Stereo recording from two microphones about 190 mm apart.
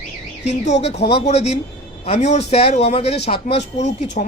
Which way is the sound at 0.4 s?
35° left (ahead or behind).